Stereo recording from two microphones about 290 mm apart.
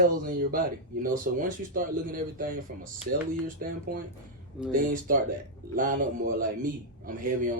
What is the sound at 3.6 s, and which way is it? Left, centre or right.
Speech, right.